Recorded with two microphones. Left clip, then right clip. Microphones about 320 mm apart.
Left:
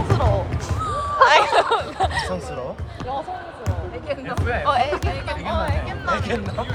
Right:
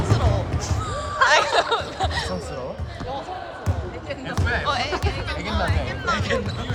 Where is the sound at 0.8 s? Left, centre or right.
Centre.